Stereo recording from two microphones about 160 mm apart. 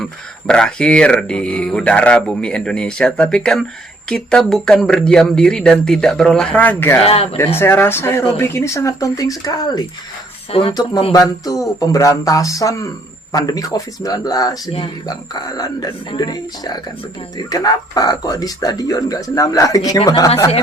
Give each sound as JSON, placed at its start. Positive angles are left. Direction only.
{"t": 0.0, "sound": "speech", "side_deg": 5}
{"t": 7.0, "sound": "speech", "side_deg": 40}
{"t": 7.3, "sound": "speech", "side_deg": 15}
{"t": 10.5, "sound": "speech", "side_deg": 35}
{"t": 11.1, "sound": "speech", "side_deg": 25}